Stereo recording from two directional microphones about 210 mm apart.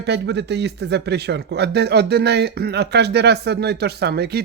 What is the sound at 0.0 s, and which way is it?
Speech, 55° right (ahead or behind).